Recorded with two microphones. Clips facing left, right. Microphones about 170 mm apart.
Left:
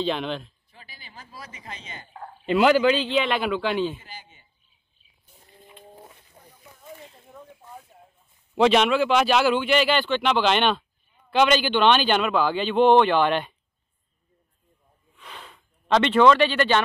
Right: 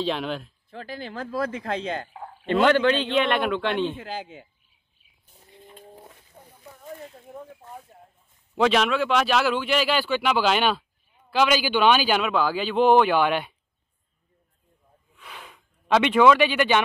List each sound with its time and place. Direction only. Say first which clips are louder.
0.0 s speech: even; centre (ahead or behind)
0.7 s speech: right 15 dB; 85° right
2.4 s speech: left 1 dB; 5° left (ahead or behind)
4.0 s speech: right 12 dB; 90° right
8.5 s speech: left 2 dB; centre (ahead or behind)
15.1 s a sound: even; 10° right (ahead or behind)